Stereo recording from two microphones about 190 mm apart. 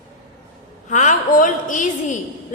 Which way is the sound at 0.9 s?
40° left (ahead or behind).